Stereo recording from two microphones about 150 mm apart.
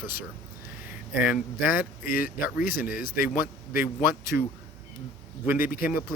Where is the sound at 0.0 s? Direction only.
70° left (ahead or behind).